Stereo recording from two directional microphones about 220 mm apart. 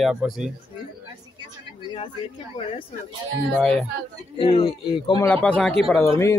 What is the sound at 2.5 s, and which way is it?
Speech, 25° left (ahead or behind).